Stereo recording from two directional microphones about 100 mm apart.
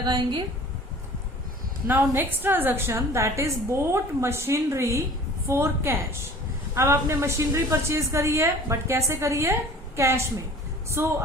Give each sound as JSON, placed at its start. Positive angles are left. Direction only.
{"t": 0.0, "sound": "a woman's voice", "side_deg": -45}
{"t": 1.9, "sound": "a woman's voice", "side_deg": -20}